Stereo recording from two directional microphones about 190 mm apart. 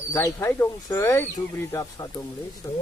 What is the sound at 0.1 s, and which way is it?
Speech, 15° left (ahead or behind).